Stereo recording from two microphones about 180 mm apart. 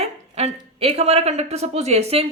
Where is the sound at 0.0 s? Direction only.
35° right (ahead or behind).